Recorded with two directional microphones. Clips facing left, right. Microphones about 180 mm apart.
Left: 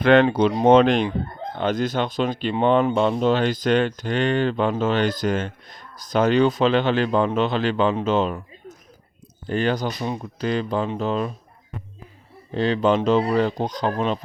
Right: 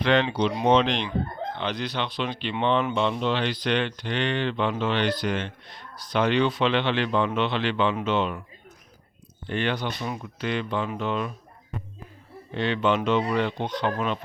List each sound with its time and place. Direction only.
0.0 s speech: 50° left (ahead or behind)
9.5 s speech: 40° left (ahead or behind)
12.5 s speech: 35° left (ahead or behind)